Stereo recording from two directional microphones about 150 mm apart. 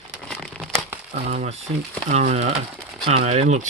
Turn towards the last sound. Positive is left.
turn(degrees=-50)  # may be behind; listen again after turning